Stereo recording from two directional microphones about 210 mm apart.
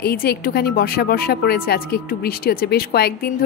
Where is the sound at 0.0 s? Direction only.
45° left (ahead or behind).